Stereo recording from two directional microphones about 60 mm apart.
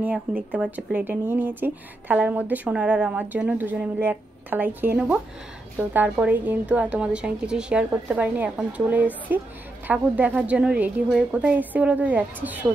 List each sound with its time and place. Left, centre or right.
0.0 s a woman's voice: right